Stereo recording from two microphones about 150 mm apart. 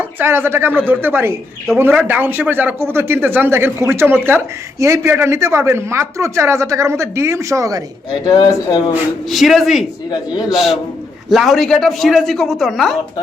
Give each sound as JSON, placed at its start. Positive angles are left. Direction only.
{"t": 0.0, "sound": "speech", "side_deg": -15}
{"t": 8.3, "sound": "speech", "side_deg": 30}
{"t": 9.3, "sound": "speech", "side_deg": 0}